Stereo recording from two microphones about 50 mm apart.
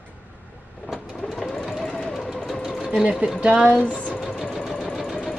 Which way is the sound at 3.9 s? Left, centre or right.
Centre.